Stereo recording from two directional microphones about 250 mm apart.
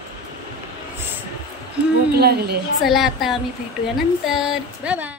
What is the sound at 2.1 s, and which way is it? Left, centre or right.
Speech, right.